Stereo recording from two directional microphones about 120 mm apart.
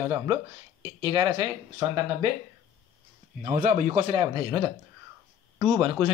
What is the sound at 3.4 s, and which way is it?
Speech, 90° right.